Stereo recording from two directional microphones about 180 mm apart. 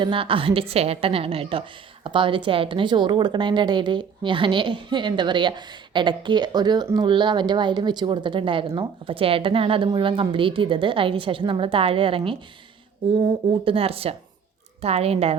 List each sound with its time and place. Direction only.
0.0 s a woman's voice: 30° right (ahead or behind)
13.5 s a woman's voice: 30° right (ahead or behind)